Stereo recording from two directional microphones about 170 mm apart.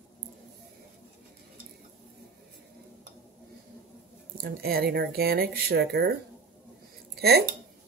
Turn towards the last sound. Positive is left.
turn(degrees=-65)  # may be behind; listen again after turning